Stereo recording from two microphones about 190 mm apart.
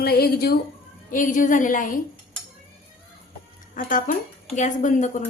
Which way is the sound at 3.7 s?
45° left (ahead or behind).